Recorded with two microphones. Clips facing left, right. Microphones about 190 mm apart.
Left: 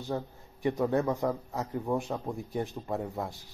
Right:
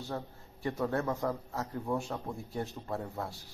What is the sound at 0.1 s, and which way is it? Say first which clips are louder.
A man's voice: left 8 dB; 15° left (ahead or behind).